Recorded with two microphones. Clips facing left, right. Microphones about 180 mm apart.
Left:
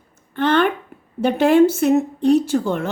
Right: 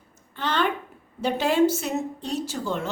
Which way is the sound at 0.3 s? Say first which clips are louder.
Left 9 dB; 60° left (ahead or behind).